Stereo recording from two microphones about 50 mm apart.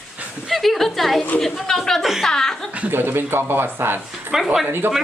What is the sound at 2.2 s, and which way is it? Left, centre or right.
Speech, centre.